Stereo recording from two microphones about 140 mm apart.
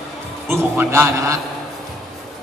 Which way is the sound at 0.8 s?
20° right (ahead or behind).